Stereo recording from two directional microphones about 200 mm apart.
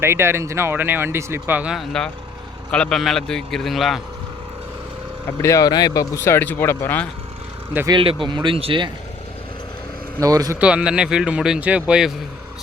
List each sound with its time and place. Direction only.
0.0 s speech: 10° right (ahead or behind)
5.4 s speech: 15° left (ahead or behind)
7.7 s speech: 10° right (ahead or behind)
7.9 s speech: 25° right (ahead or behind)
10.2 s speech: 20° right (ahead or behind)
10.6 s speech: 5° right (ahead or behind)